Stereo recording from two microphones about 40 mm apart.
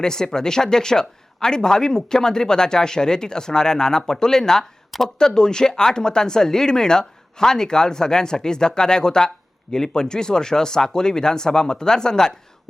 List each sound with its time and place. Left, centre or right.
0.0 s speech: centre